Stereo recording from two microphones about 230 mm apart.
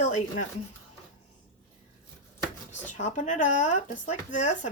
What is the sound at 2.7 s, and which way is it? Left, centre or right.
Speech, left.